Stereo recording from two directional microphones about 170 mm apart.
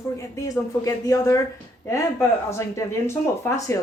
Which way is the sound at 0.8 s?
20° left (ahead or behind).